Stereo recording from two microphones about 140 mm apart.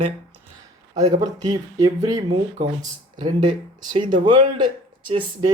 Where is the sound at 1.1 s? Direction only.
25° right (ahead or behind).